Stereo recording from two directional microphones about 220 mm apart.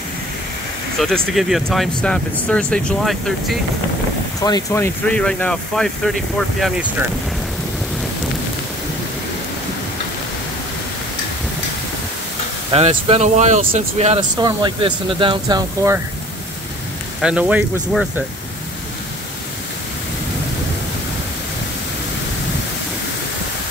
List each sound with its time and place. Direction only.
0.9 s speech: centre (ahead or behind)
4.4 s speech: 15° left (ahead or behind); by 7.1 s 5° right (ahead or behind)
12.7 s speech: 30° right (ahead or behind)
14.3 s speech: 20° right (ahead or behind)
17.2 s speech: 5° right (ahead or behind)